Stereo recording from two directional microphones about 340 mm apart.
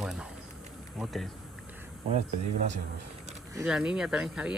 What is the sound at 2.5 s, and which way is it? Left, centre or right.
Speech, right.